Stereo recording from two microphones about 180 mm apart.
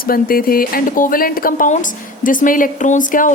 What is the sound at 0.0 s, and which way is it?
Speech, 55° left (ahead or behind).